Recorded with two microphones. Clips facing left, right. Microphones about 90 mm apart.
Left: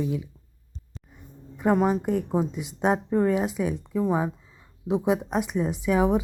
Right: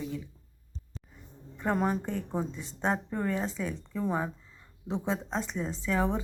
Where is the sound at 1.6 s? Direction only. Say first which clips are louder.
Left 7 dB; 15° left (ahead or behind).